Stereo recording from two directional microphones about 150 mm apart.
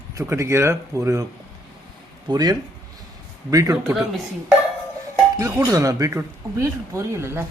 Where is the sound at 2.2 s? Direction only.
25° right (ahead or behind).